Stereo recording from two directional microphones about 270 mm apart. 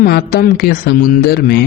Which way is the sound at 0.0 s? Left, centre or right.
Left.